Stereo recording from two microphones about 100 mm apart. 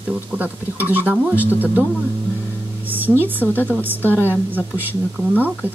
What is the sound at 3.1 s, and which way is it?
Speech, 20° right (ahead or behind).